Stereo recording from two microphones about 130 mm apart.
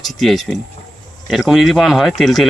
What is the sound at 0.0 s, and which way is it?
Speech, centre (ahead or behind).